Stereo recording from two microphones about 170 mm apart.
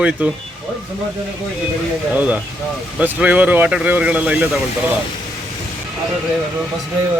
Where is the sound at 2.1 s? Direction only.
10° right (ahead or behind).